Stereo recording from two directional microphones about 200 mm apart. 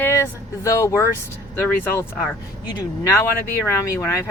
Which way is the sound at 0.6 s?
15° left (ahead or behind).